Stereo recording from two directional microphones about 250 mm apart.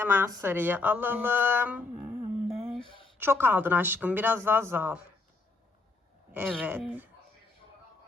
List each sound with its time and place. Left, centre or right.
0.0 s speech: centre
2.7 s a sound: right
3.2 s speech: centre
6.3 s speech: centre